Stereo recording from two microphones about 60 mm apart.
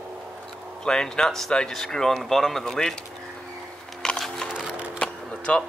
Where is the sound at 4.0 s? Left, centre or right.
Centre.